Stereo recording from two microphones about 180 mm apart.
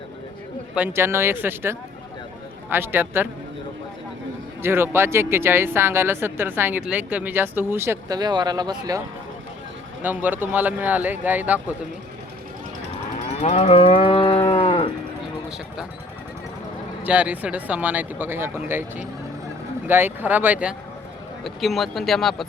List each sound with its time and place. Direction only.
0.8 s speech: 15° right (ahead or behind)
4.6 s speech: 15° right (ahead or behind)
10.0 s speech: 10° right (ahead or behind)
13.4 s moo: 30° left (ahead or behind)
17.0 s speech: 5° right (ahead or behind)
19.9 s speech: 10° right (ahead or behind)